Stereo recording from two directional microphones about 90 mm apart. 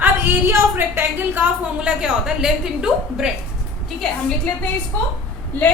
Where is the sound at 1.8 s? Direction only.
10° right (ahead or behind).